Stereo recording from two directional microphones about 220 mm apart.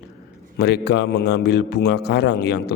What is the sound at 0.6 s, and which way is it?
A man's voice, 50° left (ahead or behind).